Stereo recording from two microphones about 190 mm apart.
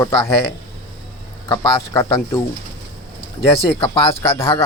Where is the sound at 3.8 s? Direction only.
30° left (ahead or behind).